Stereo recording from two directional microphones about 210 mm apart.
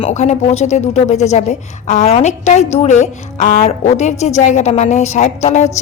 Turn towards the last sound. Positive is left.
turn(degrees=35)  # may be behind; listen again after turning